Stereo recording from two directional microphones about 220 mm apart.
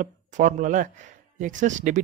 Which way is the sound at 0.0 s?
35° right (ahead or behind).